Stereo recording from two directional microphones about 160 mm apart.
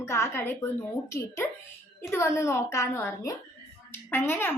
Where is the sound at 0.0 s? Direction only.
15° left (ahead or behind).